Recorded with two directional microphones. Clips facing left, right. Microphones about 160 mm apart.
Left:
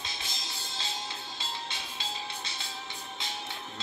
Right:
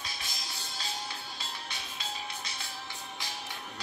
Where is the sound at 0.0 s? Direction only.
25° left (ahead or behind).